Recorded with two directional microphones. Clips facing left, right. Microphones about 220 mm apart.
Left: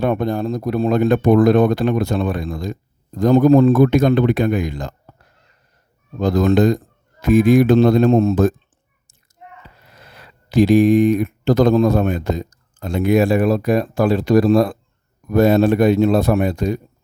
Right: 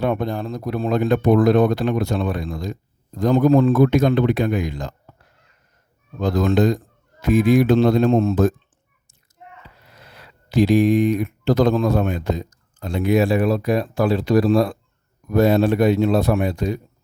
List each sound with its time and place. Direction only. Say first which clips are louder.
0.0 s speech: left 3 dB; 50° left (ahead or behind)
6.1 s speech: left 3 dB; 45° left (ahead or behind)
10.2 s speech: left 3 dB; 50° left (ahead or behind)